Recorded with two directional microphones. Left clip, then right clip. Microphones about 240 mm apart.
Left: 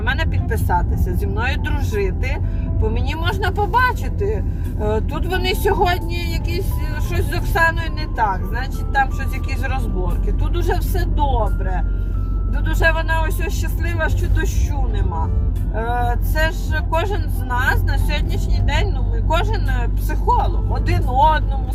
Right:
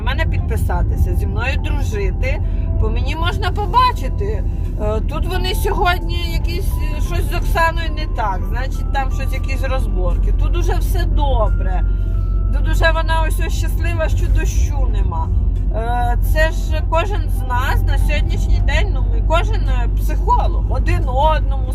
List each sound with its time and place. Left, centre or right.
0.0 s speech: right
10.5 s speech: right
12.6 s speech: right
15.7 s speech: right
19.3 s speech: right